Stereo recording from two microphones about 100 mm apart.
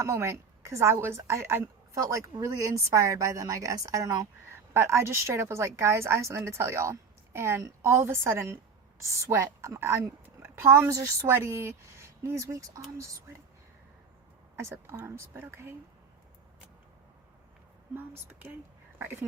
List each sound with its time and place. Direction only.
0.0 s a woman's voice: 25° right (ahead or behind)
4.4 s a woman's voice: 25° right (ahead or behind)
14.5 s a woman's voice: 25° right (ahead or behind)
17.9 s a woman's voice: 25° right (ahead or behind)